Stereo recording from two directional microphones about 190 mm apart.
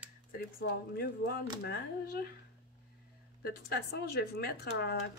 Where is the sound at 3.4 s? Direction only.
55° left (ahead or behind).